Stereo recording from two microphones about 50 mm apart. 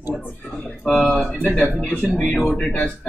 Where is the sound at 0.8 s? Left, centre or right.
Centre.